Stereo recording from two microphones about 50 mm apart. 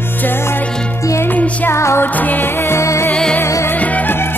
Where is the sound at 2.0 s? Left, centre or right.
Left.